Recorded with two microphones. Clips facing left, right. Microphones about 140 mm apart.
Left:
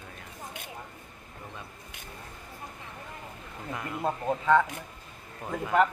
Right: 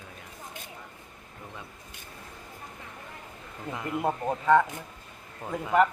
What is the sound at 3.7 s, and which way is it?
Speech, 15° right (ahead or behind).